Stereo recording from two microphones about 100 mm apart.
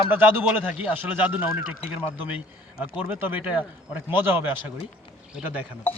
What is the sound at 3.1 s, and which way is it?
A man's voice, 20° right (ahead or behind).